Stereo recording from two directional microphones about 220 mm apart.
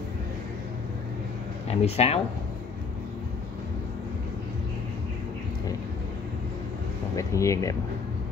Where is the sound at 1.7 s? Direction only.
30° left (ahead or behind).